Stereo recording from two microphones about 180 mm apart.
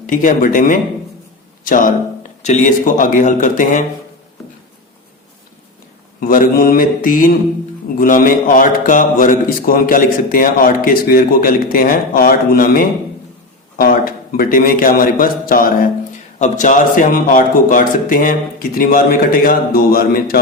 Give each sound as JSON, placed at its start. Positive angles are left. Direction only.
{"t": 0.1, "sound": "a man's voice", "side_deg": 45}
{"t": 6.1, "sound": "a man's voice", "side_deg": 50}